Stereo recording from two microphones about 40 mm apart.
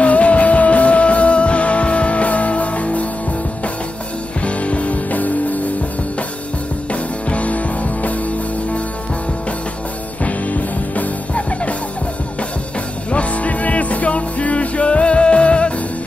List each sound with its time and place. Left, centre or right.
0.0 s music: left
4.5 s music: left
6.9 s music: left
10.2 s music: left
13.1 s music: left